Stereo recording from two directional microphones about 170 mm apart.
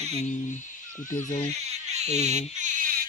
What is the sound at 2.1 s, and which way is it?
Speech, 40° right (ahead or behind).